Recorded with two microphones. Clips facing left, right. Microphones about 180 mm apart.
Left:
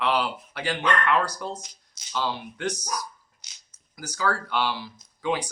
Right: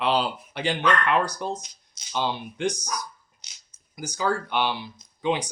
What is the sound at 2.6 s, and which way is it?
Speech, 5° left (ahead or behind).